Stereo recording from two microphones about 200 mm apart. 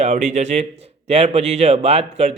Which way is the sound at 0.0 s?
40° right (ahead or behind).